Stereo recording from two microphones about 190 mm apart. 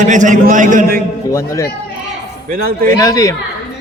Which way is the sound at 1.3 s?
15° left (ahead or behind).